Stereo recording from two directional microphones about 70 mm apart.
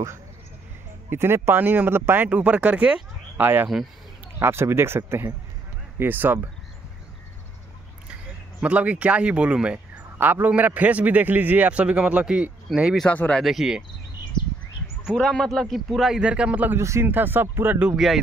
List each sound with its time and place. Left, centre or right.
1.1 s speech: right
2.2 s a man's voice: centre
3.3 s a man's voice: right
8.5 s speech: centre
10.1 s a man's voice: right
13.0 s speech: centre
13.4 s a man's voice: centre
15.0 s a man's voice: centre
16.2 s speech: centre
16.7 s speech: right
17.0 s a man's voice: right
17.9 s a man's voice: centre